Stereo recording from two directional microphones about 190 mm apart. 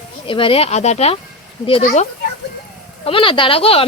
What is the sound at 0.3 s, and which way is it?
Speech, 25° left (ahead or behind).